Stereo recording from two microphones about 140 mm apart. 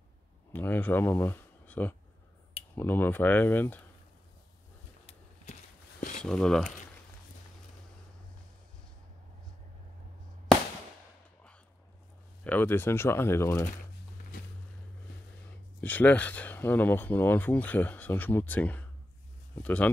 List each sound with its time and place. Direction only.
0.5 s speech: 15° left (ahead or behind)
5.0 s a sound: 65° left (ahead or behind)
6.2 s speech: 5° left (ahead or behind)
12.4 s speech: 15° left (ahead or behind)
15.8 s speech: 10° left (ahead or behind)